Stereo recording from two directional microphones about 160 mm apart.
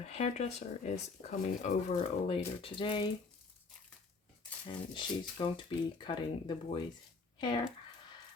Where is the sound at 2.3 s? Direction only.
35° left (ahead or behind).